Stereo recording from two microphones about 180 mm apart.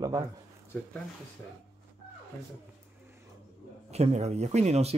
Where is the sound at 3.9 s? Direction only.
35° right (ahead or behind).